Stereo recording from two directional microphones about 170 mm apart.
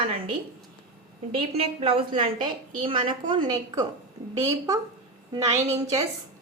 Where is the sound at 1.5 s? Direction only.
35° right (ahead or behind).